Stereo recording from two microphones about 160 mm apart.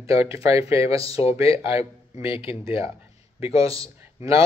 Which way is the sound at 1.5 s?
35° left (ahead or behind).